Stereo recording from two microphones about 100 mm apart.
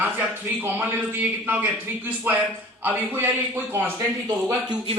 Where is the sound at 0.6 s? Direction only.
20° right (ahead or behind).